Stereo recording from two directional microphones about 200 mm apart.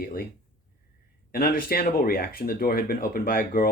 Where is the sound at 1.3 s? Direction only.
45° left (ahead or behind).